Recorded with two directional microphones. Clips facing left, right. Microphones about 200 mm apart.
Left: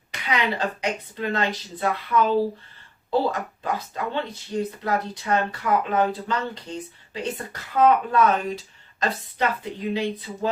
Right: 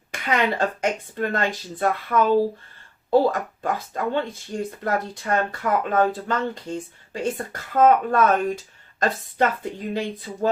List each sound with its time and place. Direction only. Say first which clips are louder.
0.1 s speech: right 3 dB; 50° right (ahead or behind)